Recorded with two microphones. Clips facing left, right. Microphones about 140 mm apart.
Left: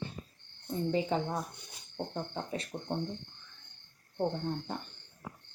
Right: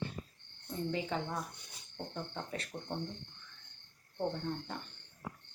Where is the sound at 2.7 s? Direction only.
25° left (ahead or behind).